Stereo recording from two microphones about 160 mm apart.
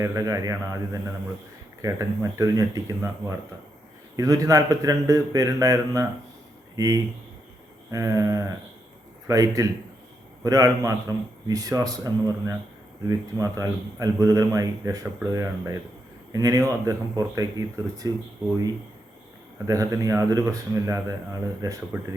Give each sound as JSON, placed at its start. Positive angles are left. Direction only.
{"t": 0.0, "sound": "a man's voice", "side_deg": -20}
{"t": 1.8, "sound": "a man's voice", "side_deg": -20}
{"t": 19.5, "sound": "a man's voice", "side_deg": -20}